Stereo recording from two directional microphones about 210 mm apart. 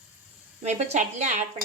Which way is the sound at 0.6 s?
35° right (ahead or behind).